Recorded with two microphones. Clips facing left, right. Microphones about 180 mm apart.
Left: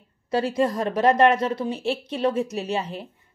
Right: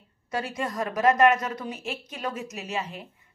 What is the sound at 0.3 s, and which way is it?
A woman's voice, 35° left (ahead or behind).